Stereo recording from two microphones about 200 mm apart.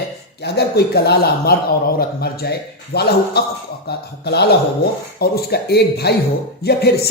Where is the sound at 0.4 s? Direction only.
55° left (ahead or behind).